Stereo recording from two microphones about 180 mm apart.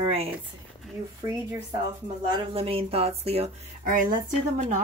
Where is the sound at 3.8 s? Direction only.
50° right (ahead or behind).